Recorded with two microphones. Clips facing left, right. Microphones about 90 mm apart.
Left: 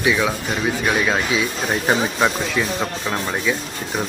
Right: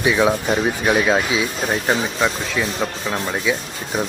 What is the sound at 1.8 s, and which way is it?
Speech, 5° left (ahead or behind).